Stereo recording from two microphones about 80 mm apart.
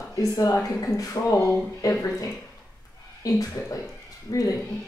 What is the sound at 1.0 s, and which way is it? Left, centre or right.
Speech, left.